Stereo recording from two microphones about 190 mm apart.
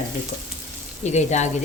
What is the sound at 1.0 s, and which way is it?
Speech, 35° left (ahead or behind).